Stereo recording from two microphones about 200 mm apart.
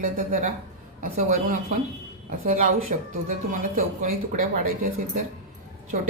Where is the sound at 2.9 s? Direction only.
40° right (ahead or behind).